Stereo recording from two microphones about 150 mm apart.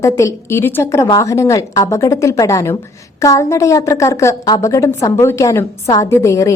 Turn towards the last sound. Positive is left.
turn(degrees=20)  # may be behind; listen again after turning